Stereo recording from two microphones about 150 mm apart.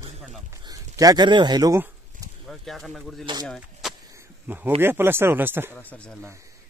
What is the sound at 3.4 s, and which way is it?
Vehicle, centre (ahead or behind).